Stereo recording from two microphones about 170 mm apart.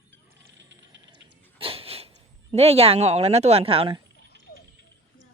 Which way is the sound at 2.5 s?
35° right (ahead or behind).